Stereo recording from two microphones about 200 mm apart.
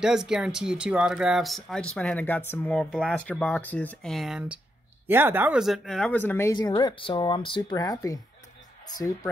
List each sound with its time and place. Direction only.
0.0 s speech: 5° right (ahead or behind); by 9.3 s 20° left (ahead or behind)